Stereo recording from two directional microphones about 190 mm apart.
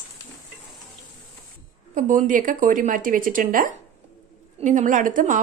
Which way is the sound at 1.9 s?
45° right (ahead or behind).